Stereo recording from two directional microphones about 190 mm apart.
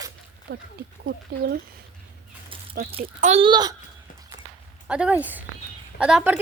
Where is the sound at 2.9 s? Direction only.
30° right (ahead or behind).